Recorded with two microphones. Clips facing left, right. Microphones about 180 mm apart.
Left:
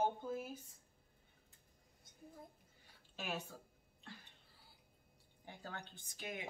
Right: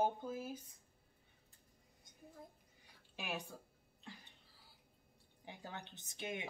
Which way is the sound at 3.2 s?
10° right (ahead or behind).